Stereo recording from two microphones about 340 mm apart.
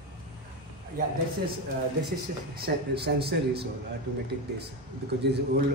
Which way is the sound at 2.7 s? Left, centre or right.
Right.